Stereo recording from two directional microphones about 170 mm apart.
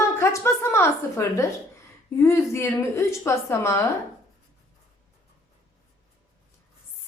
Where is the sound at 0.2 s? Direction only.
15° left (ahead or behind).